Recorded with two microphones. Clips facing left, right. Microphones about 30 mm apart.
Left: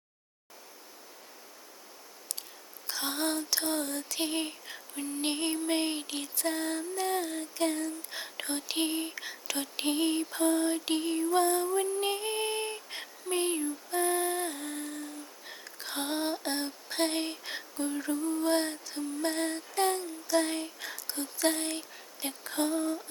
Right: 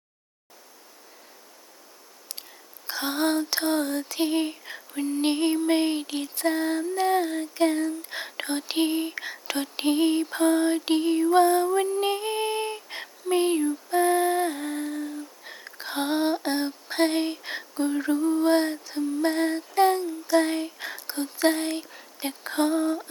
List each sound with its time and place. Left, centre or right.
2.8 s female singing: right
4.2 s female singing: centre
6.3 s female singing: right
6.9 s female singing: right
8.8 s female singing: centre
9.2 s a sound: right
9.8 s female singing: centre
10.2 s lullaby: right
11.9 s female singing: centre
15.6 s a sound: right
17.7 s lullaby: right
18.5 s female singing: centre
20.7 s a sound: right
22.4 s lullaby: right